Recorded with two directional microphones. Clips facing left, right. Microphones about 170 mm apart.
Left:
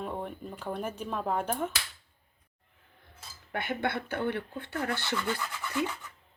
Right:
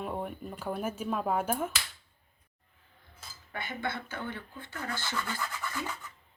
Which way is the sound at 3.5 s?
60° left (ahead or behind).